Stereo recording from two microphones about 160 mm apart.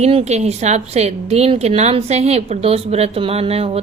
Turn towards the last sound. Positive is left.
turn(degrees=-40)  # may be behind; listen again after turning